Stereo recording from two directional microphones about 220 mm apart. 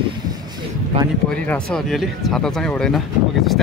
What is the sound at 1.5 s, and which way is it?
Speech, 5° left (ahead or behind).